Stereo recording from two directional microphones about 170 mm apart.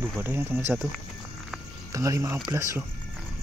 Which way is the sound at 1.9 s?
20° right (ahead or behind).